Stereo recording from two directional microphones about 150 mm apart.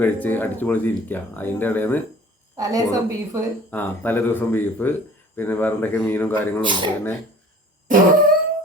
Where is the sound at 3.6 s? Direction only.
10° left (ahead or behind).